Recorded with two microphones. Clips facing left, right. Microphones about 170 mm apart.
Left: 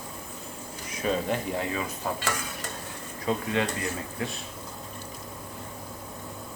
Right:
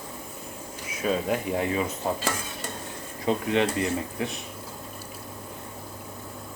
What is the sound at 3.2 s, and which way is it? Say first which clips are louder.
Speech: right 3 dB; 20° right (ahead or behind).